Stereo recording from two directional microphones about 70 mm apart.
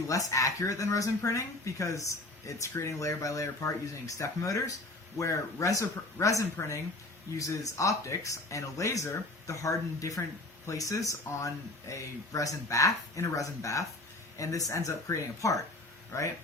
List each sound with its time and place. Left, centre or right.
0.1 s speech: left